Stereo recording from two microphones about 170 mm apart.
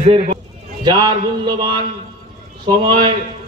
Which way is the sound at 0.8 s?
25° right (ahead or behind).